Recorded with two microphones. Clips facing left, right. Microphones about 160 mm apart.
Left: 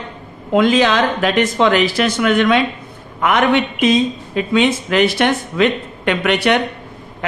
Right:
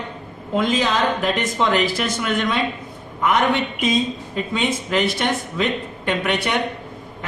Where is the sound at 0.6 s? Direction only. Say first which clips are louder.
Left 6 dB; 80° left.